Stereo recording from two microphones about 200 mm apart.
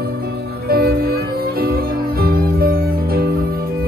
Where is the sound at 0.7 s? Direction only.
50° right (ahead or behind).